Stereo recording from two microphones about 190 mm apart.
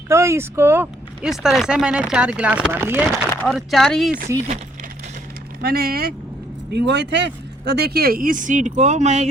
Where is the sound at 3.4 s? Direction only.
Centre (ahead or behind).